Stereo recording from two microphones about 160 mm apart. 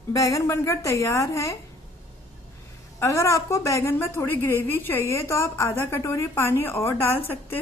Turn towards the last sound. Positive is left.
turn(degrees=15)  # may be behind; listen again after turning